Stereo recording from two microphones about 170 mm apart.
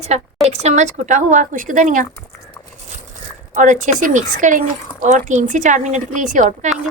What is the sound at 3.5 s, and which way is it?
A woman's voice, 45° right (ahead or behind).